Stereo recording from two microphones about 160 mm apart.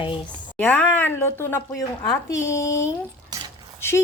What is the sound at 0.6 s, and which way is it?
Speech, 10° left (ahead or behind).